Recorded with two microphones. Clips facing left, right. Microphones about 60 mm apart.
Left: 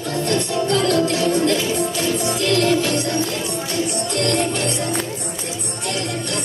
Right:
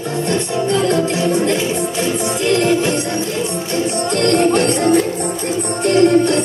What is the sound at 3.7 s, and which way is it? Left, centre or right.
Music, right.